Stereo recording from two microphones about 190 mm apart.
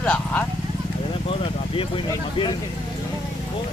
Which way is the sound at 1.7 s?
30° left (ahead or behind).